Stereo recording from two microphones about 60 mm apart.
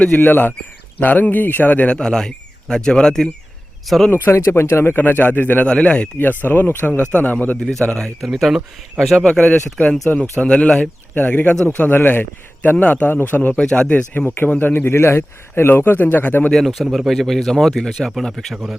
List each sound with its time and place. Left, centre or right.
0.2 s speech: left
2.0 s speech: centre
4.1 s speech: left; by 6.1 s centre
6.1 s speech: left
7.6 s speech: centre
8.2 s speech: centre
9.1 s speech: centre; by 13.5 s left
13.6 s speech: centre; by 14.9 s left
14.9 s speech: left
16.5 s speech: centre